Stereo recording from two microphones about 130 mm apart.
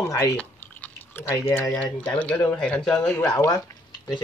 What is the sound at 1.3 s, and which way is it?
Speech, 20° left (ahead or behind).